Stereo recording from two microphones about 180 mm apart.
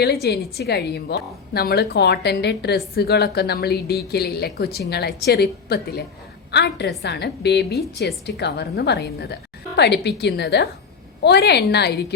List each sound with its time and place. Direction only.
0.0 s a woman's voice: 60° left (ahead or behind)